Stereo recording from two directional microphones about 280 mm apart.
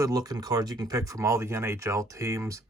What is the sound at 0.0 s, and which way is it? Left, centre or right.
Speech, centre.